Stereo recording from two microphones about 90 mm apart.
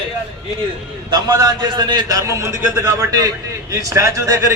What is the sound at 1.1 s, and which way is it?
A man's voice, 45° right (ahead or behind).